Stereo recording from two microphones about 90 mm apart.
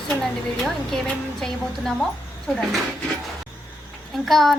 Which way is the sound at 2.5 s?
Centre (ahead or behind).